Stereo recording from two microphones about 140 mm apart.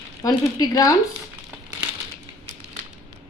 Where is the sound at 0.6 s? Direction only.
25° left (ahead or behind).